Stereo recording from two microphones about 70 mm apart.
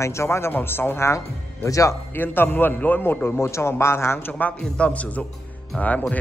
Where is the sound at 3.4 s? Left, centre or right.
Left.